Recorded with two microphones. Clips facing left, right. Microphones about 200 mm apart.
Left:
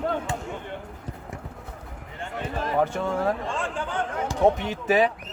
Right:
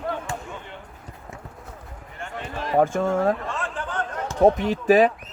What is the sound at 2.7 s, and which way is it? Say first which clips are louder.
Speech: right 5 dB; 45° right (ahead or behind).